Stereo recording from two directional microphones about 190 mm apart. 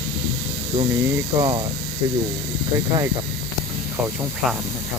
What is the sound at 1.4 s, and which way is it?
Speech, 25° right (ahead or behind).